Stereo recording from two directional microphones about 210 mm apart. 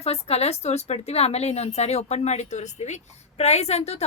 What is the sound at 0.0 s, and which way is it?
A woman's voice, 30° left (ahead or behind).